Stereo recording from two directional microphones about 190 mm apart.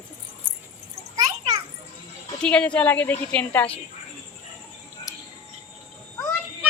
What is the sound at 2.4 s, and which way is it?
A woman's voice, 5° left (ahead or behind).